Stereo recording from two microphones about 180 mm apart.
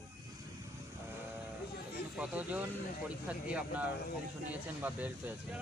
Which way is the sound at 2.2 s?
10° right (ahead or behind).